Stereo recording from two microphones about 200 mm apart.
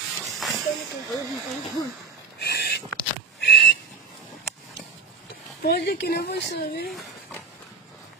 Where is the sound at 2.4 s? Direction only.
55° left (ahead or behind).